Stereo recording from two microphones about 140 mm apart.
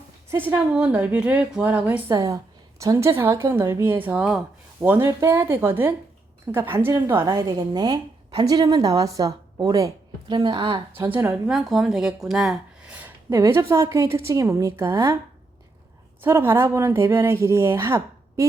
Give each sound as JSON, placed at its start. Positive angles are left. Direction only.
{"t": 0.3, "sound": "speech", "side_deg": -15}
{"t": 2.0, "sound": "speech", "side_deg": -25}
{"t": 10.9, "sound": "speech", "side_deg": -15}
{"t": 16.2, "sound": "speech", "side_deg": -15}